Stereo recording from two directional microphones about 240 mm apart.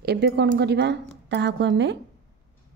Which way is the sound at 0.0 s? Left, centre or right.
Right.